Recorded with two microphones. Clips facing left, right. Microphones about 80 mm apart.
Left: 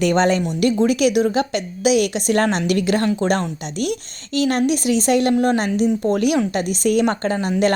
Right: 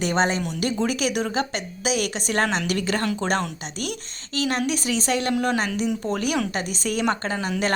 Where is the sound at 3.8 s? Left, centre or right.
Right.